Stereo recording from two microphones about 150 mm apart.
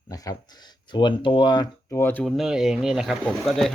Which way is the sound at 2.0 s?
10° left (ahead or behind).